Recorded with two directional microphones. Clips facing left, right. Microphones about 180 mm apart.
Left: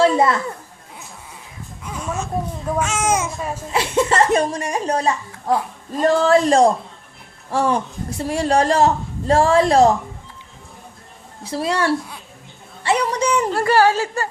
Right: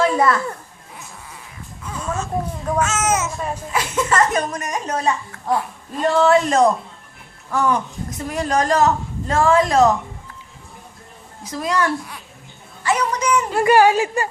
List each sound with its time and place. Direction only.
0.0 s children playing: 25° left (ahead or behind)
1.9 s babbling: 10° left (ahead or behind)
2.7 s a child's voice: 10° left (ahead or behind)
3.7 s a woman's voice: 30° left (ahead or behind)
11.4 s a woman's voice: 30° left (ahead or behind)
13.5 s a woman's voice: 15° right (ahead or behind)